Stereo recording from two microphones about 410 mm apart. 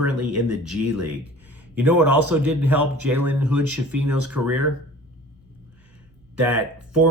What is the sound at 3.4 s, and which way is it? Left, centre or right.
Speech, right.